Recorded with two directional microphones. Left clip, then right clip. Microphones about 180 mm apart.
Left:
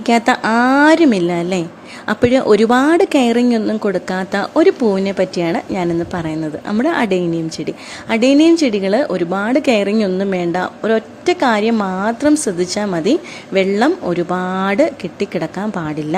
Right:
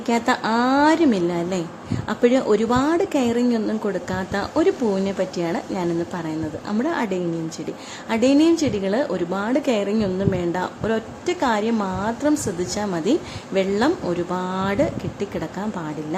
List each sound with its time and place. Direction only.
0.0 s a woman's voice: 30° left (ahead or behind)
0.4 s a woman's voice: 20° left (ahead or behind)